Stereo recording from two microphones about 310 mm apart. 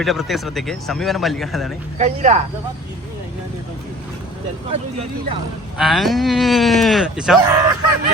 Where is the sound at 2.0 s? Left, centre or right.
Right.